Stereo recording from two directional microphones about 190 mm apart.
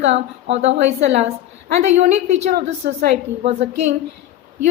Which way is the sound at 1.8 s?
35° right (ahead or behind).